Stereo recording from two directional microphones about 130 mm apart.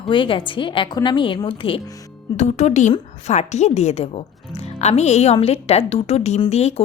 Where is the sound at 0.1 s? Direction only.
40° left (ahead or behind).